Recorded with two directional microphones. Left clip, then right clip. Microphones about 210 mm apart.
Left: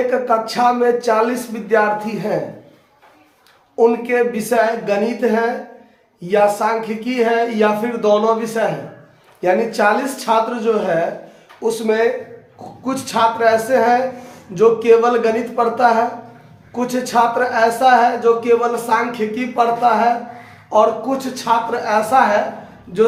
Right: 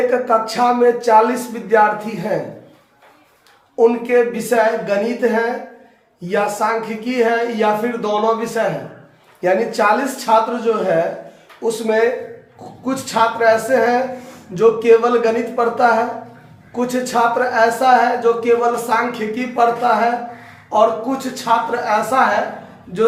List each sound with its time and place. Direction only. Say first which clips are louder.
0.1 s speech: right 1 dB; 15° left (ahead or behind)
3.8 s speech: right 1 dB; 20° left (ahead or behind)